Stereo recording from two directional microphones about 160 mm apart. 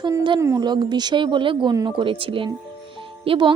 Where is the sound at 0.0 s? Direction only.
25° right (ahead or behind).